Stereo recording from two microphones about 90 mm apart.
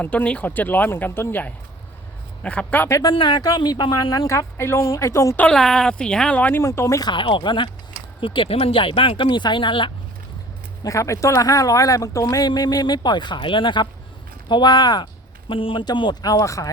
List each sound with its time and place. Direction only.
0.0 s speech: 15° left (ahead or behind)
3.0 s speech: 55° left (ahead or behind); by 5.4 s 35° left (ahead or behind)
5.4 s speech: 5° left (ahead or behind)
6.6 s speech: 35° left (ahead or behind)
7.1 s speech: 65° left (ahead or behind)
8.2 s speech: 75° left (ahead or behind)
10.8 s speech: 35° left (ahead or behind); by 15.0 s 55° left (ahead or behind)
15.4 s speech: 70° left (ahead or behind)
16.2 s speech: 40° left (ahead or behind)